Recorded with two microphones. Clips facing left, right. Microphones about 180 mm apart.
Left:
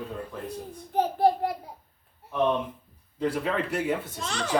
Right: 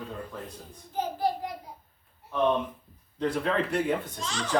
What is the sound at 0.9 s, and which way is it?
Speech, 60° left (ahead or behind).